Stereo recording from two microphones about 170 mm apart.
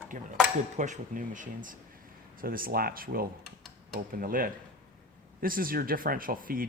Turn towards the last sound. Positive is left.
turn(degrees=-55)  # may be behind; listen again after turning